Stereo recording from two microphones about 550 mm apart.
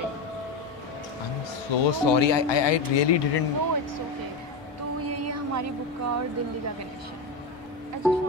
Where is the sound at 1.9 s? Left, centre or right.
Left.